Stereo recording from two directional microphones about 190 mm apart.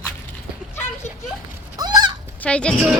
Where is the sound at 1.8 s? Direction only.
20° right (ahead or behind).